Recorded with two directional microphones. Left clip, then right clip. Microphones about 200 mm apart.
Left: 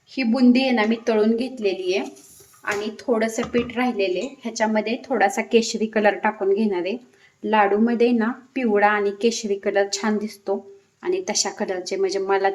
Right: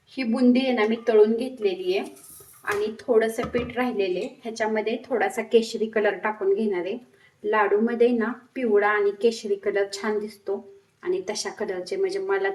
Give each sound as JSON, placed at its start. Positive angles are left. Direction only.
{"t": 0.2, "sound": "a woman's voice", "side_deg": 45}